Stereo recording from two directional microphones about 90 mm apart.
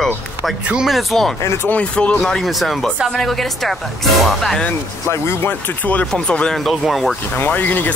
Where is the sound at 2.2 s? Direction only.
5° left (ahead or behind).